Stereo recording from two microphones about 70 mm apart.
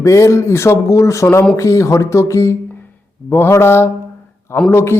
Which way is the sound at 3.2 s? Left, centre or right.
Left.